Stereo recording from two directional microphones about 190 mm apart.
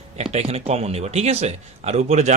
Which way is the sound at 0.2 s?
35° right (ahead or behind).